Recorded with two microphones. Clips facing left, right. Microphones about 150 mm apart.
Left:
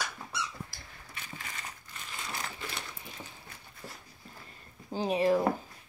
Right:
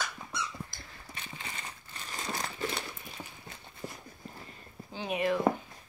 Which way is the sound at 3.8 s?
15° right (ahead or behind).